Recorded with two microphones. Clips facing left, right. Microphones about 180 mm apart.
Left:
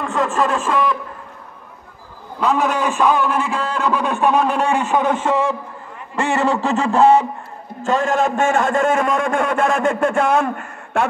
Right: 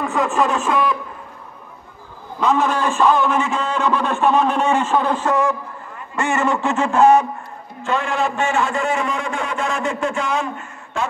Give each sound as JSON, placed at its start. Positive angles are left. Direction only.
{"t": 0.0, "sound": "speech", "side_deg": 0}
{"t": 2.4, "sound": "a man's voice", "side_deg": 10}
{"t": 7.8, "sound": "a man's voice", "side_deg": 40}